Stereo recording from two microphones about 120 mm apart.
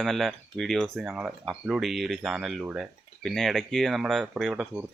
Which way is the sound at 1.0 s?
10° right (ahead or behind).